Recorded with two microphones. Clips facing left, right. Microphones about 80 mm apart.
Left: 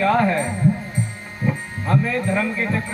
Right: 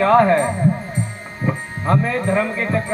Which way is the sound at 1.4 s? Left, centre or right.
Right.